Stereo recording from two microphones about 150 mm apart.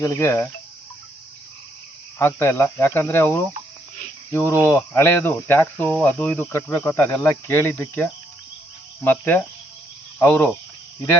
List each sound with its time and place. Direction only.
0.0 s speech: 20° left (ahead or behind)
2.1 s speech: 15° left (ahead or behind)